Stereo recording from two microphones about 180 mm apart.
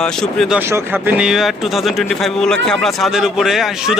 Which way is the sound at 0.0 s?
5° left (ahead or behind).